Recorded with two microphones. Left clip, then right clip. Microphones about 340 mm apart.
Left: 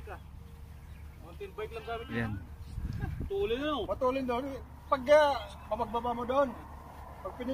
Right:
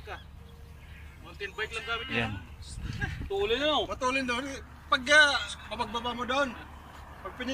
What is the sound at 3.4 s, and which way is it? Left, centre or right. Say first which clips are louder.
Speech: right 6 dB; centre.